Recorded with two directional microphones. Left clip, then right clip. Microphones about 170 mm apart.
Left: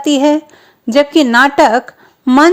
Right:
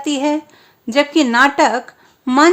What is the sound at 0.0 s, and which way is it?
A woman's voice, 35° left (ahead or behind).